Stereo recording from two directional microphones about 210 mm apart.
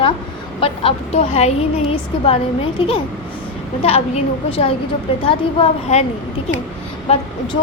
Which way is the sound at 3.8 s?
30° left (ahead or behind).